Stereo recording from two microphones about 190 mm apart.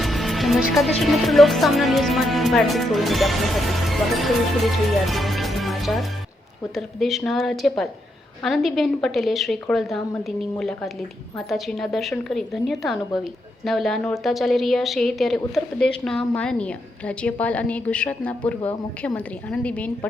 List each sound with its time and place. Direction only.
0.0 s music: centre (ahead or behind)
1.0 s a woman's voice: centre (ahead or behind)